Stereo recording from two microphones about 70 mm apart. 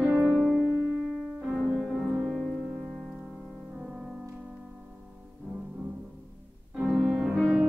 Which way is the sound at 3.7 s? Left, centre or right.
Centre.